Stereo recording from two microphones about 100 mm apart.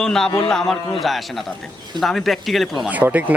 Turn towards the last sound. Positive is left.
turn(degrees=-15)  # may be behind; listen again after turning